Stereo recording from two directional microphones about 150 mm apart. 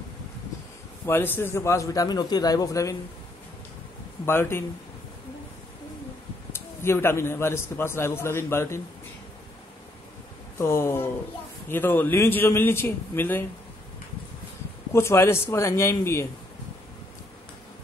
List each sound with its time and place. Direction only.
1.0 s a man's voice: 15° left (ahead or behind)
4.3 s a man's voice: 15° left (ahead or behind)
6.5 s a man's voice: 15° left (ahead or behind)
10.6 s a man's voice: 15° left (ahead or behind)
14.9 s a man's voice: 15° left (ahead or behind)